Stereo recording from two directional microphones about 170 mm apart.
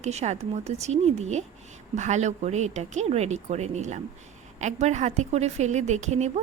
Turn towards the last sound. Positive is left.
turn(degrees=-40)  # may be behind; listen again after turning